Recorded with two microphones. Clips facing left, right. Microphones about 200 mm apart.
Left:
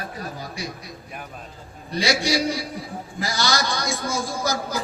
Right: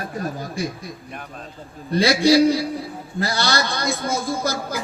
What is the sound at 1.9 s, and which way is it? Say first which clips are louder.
A man's voice: right 7 dB; 55° right (ahead or behind).